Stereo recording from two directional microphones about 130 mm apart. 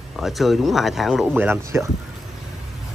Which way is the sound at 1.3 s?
15° right (ahead or behind).